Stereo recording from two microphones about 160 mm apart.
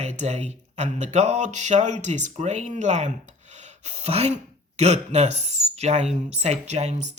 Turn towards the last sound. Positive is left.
turn(degrees=-45)  # may be behind; listen again after turning